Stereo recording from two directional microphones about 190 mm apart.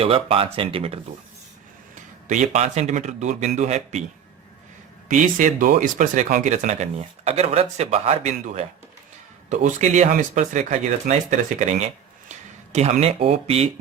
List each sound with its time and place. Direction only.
0.0 s speech: 30° right (ahead or behind)
2.0 s speech: 40° right (ahead or behind)
5.0 s speech: 45° right (ahead or behind)